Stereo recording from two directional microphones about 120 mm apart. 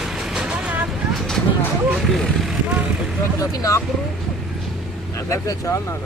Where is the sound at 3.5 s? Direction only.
30° left (ahead or behind).